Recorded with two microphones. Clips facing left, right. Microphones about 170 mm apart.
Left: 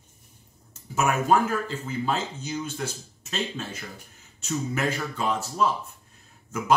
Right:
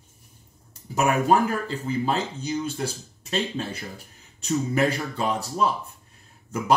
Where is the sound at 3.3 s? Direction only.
35° right (ahead or behind).